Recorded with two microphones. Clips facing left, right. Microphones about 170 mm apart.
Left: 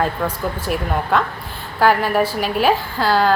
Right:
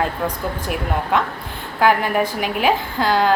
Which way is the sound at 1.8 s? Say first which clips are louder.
Left 1 dB; 15° right (ahead or behind).